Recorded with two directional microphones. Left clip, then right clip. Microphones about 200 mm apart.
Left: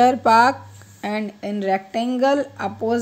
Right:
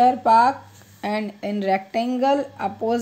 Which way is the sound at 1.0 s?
5° left (ahead or behind).